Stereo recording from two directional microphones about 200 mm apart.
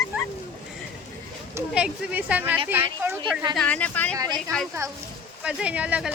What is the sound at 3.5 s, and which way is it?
Speech, 5° left (ahead or behind).